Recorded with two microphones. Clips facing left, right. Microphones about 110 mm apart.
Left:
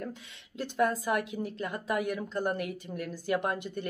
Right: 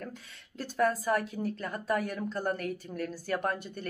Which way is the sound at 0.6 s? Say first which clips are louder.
Even; 20° left (ahead or behind).